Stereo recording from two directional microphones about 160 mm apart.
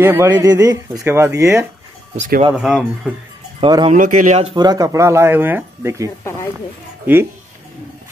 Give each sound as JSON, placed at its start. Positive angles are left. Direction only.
{"t": 0.0, "sound": "speech", "side_deg": -15}
{"t": 2.1, "sound": "speech", "side_deg": -55}
{"t": 2.5, "sound": "speech", "side_deg": 0}
{"t": 3.6, "sound": "speech", "side_deg": -30}
{"t": 3.9, "sound": "speech", "side_deg": -55}
{"t": 4.6, "sound": "speech", "side_deg": -25}